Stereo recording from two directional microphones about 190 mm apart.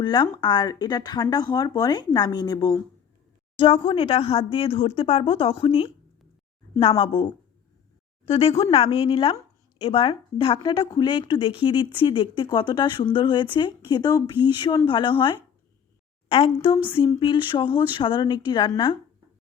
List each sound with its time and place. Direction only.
0.0 s speech: 20° left (ahead or behind)
6.9 s speech: 25° left (ahead or behind)
8.3 s speech: 30° left (ahead or behind)